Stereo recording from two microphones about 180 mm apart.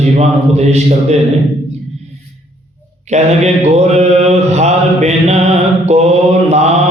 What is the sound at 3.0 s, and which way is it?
Mantra, 40° right (ahead or behind).